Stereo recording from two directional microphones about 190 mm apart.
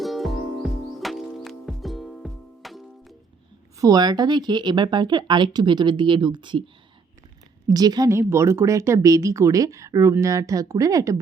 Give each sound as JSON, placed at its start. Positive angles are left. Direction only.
{"t": 0.0, "sound": "music", "side_deg": 0}
{"t": 3.8, "sound": "speech", "side_deg": -20}
{"t": 7.7, "sound": "speech", "side_deg": -20}